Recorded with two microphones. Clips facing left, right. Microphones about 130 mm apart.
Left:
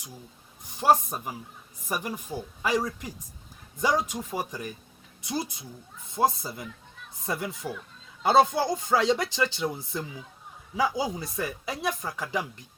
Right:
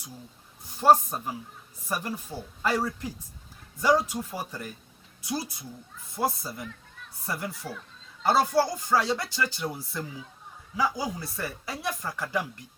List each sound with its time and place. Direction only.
0.8 s speech: 15° left (ahead or behind)